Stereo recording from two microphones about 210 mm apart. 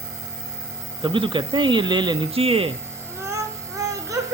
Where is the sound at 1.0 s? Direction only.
25° right (ahead or behind).